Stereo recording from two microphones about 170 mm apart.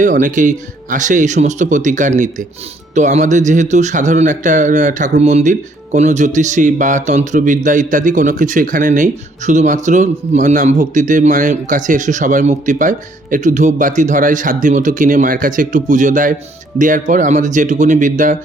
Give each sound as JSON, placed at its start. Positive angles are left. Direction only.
{"t": 0.0, "sound": "a man's voice", "side_deg": -50}